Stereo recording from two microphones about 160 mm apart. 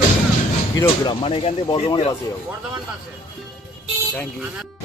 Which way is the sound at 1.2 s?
35° left (ahead or behind).